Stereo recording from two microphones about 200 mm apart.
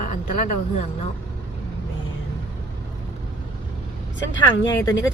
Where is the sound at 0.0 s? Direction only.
40° left (ahead or behind).